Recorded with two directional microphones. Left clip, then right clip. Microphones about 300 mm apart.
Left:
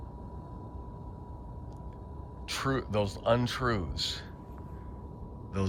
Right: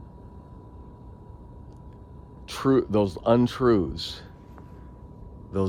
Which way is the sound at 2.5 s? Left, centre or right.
Centre.